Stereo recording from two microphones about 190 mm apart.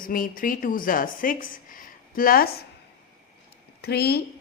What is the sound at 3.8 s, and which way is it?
Speech, 55° left (ahead or behind).